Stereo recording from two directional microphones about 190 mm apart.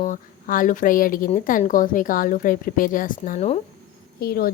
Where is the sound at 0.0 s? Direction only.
45° left (ahead or behind).